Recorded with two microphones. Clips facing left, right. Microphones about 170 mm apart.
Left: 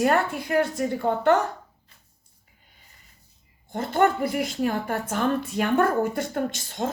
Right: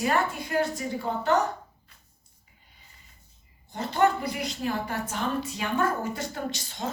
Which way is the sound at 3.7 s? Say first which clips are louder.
Left 2 dB; 50° left (ahead or behind).